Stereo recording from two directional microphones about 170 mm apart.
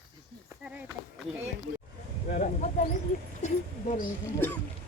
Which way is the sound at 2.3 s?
50° left (ahead or behind).